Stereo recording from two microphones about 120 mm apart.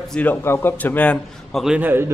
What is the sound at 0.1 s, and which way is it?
A man's voice, 15° left (ahead or behind).